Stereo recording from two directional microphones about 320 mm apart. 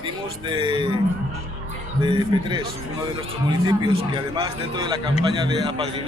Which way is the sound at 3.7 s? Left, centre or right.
Centre.